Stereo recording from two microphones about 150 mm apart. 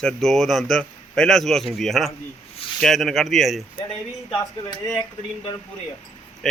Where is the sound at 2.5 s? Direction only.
35° left (ahead or behind).